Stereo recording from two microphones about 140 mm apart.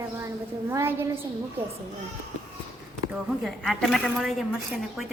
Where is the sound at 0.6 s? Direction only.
20° right (ahead or behind).